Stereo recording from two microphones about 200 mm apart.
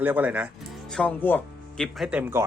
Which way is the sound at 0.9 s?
5° left (ahead or behind).